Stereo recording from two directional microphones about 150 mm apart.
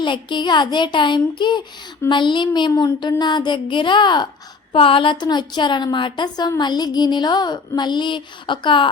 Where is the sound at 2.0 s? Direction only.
30° left (ahead or behind).